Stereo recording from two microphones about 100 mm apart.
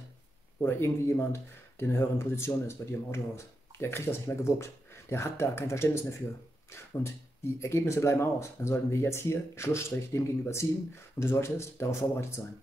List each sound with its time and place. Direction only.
0.6 s speech: 25° left (ahead or behind)
6.7 s music: 30° left (ahead or behind)
7.5 s speech: 30° left (ahead or behind)